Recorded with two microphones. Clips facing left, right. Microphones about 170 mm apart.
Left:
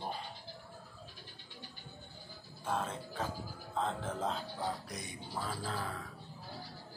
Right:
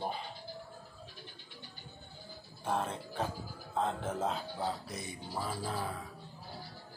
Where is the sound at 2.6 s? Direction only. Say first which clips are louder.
Right 2 dB; 15° right (ahead or behind).